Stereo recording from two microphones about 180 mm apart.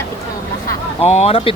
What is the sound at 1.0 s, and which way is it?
Speech, 35° left (ahead or behind).